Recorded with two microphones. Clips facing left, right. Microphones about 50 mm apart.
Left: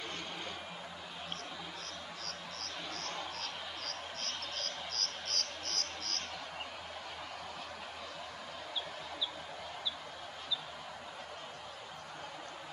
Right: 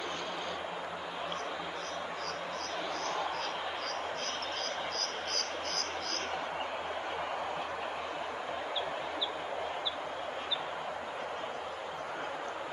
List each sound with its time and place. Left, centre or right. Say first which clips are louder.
4.9 s cricket: right 5 dB; centre